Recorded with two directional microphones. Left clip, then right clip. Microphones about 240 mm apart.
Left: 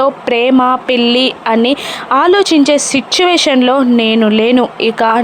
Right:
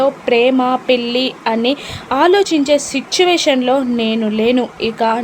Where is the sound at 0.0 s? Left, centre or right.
Centre.